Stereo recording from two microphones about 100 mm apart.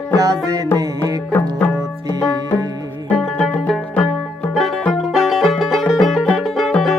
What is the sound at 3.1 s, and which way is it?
Music, centre (ahead or behind).